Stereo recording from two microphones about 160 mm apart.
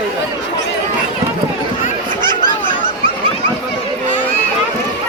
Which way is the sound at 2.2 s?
30° right (ahead or behind).